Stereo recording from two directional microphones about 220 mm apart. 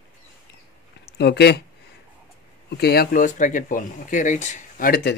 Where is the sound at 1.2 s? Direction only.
50° left (ahead or behind).